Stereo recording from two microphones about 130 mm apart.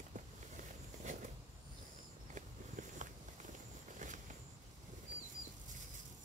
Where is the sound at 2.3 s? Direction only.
70° right (ahead or behind).